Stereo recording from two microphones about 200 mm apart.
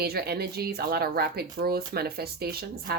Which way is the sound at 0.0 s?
50° right (ahead or behind).